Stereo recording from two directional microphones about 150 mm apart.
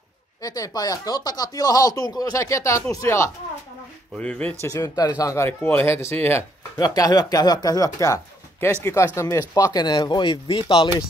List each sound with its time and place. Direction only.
0.4 s speech: 25° left (ahead or behind)
4.2 s speech: 10° left (ahead or behind)
4.6 s speech: 25° left (ahead or behind)